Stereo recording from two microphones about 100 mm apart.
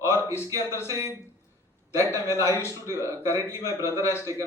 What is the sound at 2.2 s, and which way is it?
Speech, 30° left (ahead or behind).